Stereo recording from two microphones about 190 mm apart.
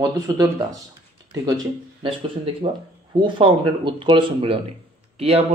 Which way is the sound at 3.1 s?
25° right (ahead or behind).